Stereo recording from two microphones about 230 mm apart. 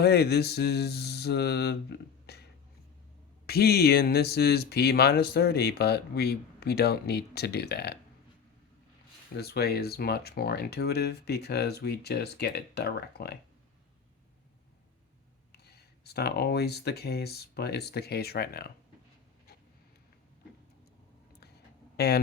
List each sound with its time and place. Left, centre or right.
0.0 s speech: left
2.2 s a sound: left
3.4 s speech: left
9.4 s speech: left
15.5 s speech: left
21.9 s speech: left